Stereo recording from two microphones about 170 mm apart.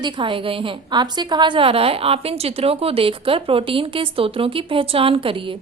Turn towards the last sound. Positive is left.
turn(degrees=-30)  # may be behind; listen again after turning